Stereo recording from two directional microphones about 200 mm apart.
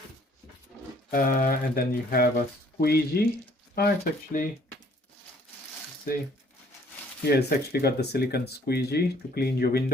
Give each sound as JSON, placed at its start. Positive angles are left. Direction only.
{"t": 1.1, "sound": "speech", "side_deg": 45}
{"t": 6.1, "sound": "speech", "side_deg": 45}
{"t": 7.3, "sound": "speech", "side_deg": 50}